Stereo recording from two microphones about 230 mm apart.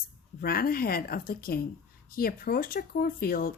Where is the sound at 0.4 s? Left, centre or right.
Left.